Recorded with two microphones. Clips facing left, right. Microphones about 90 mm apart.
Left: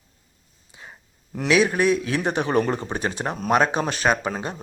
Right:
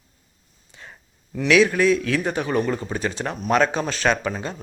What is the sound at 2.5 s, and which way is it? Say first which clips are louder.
Speech: left 1 dB; 40° left (ahead or behind).